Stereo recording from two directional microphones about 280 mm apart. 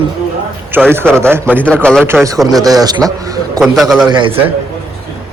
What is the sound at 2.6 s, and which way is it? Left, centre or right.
A man's voice, centre.